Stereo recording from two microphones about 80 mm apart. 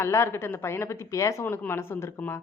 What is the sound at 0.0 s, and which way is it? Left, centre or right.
A woman's voice, left.